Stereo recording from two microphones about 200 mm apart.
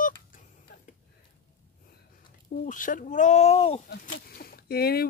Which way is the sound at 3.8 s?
45° left (ahead or behind).